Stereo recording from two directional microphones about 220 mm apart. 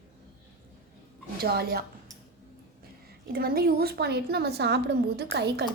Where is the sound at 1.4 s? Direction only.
45° right (ahead or behind).